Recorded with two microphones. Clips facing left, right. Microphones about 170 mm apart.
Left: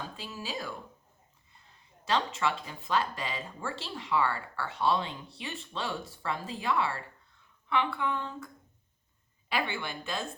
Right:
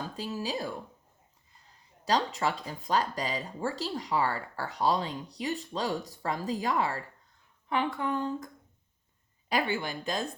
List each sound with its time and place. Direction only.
0.2 s speech: 40° right (ahead or behind)
2.0 s speech: 40° right (ahead or behind)
9.5 s speech: 40° right (ahead or behind)